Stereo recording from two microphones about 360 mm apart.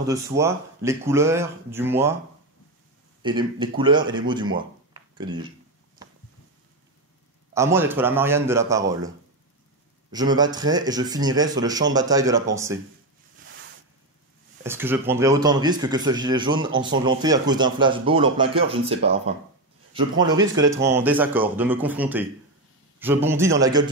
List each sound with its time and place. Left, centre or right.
0.0 s a man's voice: centre
3.2 s a man's voice: centre
7.5 s a man's voice: centre
10.1 s a man's voice: centre
13.5 s a sound: right
14.6 s a man's voice: centre